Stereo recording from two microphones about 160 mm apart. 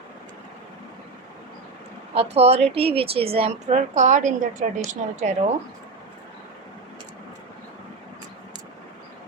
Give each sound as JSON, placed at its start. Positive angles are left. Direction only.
{"t": 2.3, "sound": "a woman's voice", "side_deg": -40}